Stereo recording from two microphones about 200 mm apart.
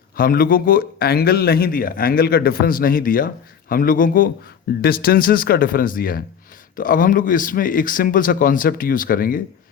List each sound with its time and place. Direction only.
0.2 s a man's voice: 45° left (ahead or behind)